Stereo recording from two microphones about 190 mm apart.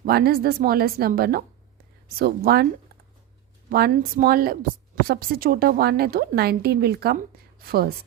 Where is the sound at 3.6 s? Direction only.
50° right (ahead or behind).